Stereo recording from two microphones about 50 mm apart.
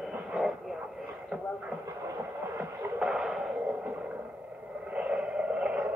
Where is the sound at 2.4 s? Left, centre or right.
Right.